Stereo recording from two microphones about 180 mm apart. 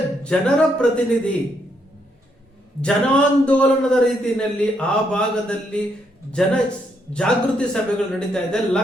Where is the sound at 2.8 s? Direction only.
5° left (ahead or behind).